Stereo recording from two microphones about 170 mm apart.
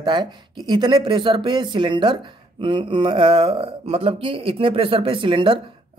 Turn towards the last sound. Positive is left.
turn(degrees=-30)  # may be behind; listen again after turning